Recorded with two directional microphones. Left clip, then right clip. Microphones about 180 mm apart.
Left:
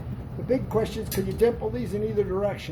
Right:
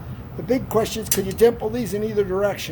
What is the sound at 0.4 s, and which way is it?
Speech, 55° right (ahead or behind).